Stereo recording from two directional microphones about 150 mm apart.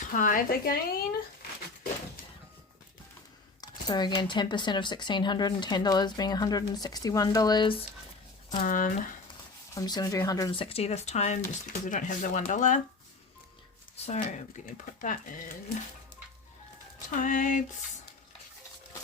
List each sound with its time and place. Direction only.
0.1 s speech: 65° left (ahead or behind); by 1.0 s 90° left
3.6 s speech: 30° left (ahead or behind)
8.5 s speech: 55° left (ahead or behind)
9.7 s speech: 25° left (ahead or behind)
10.5 s speech: 40° left (ahead or behind); by 12.8 s 55° left (ahead or behind)
13.9 s speech: 50° left (ahead or behind)
15.0 s speech: 65° left (ahead or behind)
17.1 s speech: 60° left (ahead or behind)